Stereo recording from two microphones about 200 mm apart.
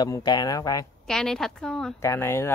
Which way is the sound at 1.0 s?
Centre (ahead or behind).